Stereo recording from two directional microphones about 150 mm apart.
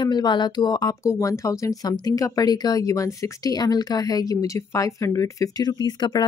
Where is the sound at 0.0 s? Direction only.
30° left (ahead or behind).